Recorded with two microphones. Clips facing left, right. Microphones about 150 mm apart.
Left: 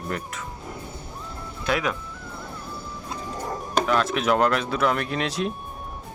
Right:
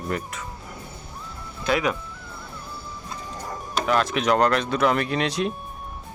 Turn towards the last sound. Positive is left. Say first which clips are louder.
# right 2 dB
turn(degrees=0)  # may be behind; listen again after turning